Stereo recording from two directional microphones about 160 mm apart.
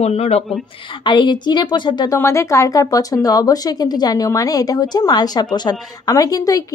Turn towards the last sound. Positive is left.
turn(degrees=20)  # may be behind; listen again after turning